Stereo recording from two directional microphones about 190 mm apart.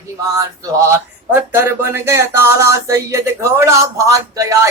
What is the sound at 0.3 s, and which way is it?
Speech, 15° right (ahead or behind).